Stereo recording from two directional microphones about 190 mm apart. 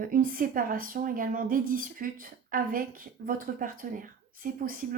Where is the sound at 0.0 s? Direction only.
45° right (ahead or behind).